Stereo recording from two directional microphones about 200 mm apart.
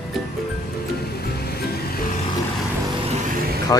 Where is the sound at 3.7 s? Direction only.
20° left (ahead or behind).